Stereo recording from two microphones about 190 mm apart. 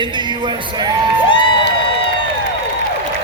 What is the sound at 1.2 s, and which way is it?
Crowd, 25° left (ahead or behind).